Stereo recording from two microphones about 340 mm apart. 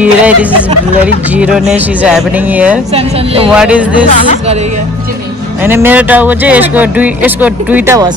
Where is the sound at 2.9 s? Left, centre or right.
Centre.